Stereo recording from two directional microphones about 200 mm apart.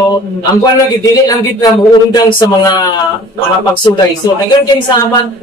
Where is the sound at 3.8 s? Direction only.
20° left (ahead or behind).